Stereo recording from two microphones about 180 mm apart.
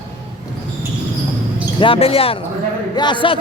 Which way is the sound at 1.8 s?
30° left (ahead or behind).